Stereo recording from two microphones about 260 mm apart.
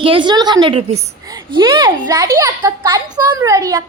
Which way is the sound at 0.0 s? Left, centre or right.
Centre.